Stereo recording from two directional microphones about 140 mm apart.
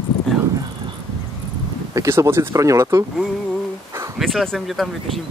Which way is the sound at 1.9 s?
20° right (ahead or behind).